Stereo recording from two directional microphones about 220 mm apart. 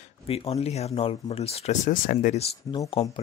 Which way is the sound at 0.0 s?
25° left (ahead or behind).